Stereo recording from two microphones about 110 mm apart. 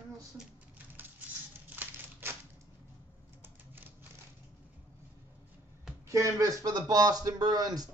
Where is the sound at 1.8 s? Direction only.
20° right (ahead or behind).